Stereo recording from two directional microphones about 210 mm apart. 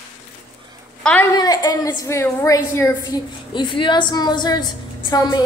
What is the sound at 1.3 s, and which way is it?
A woman's voice, 15° left (ahead or behind).